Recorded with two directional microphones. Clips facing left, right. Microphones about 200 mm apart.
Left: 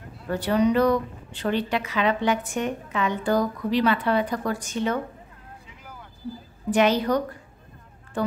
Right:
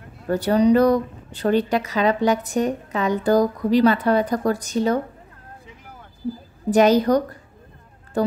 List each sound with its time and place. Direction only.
0.3 s a woman's voice: 40° right (ahead or behind)
6.7 s a woman's voice: 40° right (ahead or behind)